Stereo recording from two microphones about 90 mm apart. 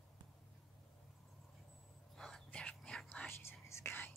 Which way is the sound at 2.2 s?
5° left (ahead or behind).